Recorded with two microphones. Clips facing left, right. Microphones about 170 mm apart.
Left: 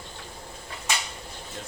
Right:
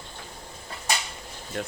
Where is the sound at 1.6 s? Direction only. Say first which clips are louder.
Right 10 dB; 65° right (ahead or behind).